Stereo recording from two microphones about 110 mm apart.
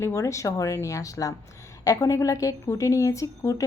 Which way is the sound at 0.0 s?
25° left (ahead or behind).